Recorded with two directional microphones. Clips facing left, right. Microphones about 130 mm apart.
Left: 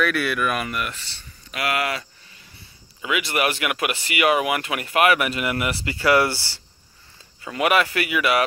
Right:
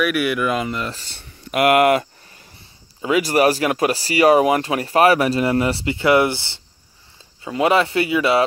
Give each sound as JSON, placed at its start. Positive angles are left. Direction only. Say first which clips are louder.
{"t": 0.0, "sound": "speech", "louder": "right 3 dB", "side_deg": -15}
{"t": 0.9, "sound": "cricket", "louder": "right 2 dB", "side_deg": -50}
{"t": 3.0, "sound": "speech", "louder": "right 7 dB", "side_deg": -35}